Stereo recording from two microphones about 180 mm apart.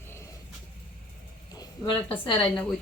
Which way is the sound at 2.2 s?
25° left (ahead or behind).